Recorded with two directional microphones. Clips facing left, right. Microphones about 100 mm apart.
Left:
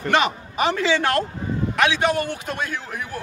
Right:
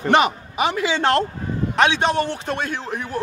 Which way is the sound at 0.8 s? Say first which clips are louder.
Right 1 dB; 25° right (ahead or behind).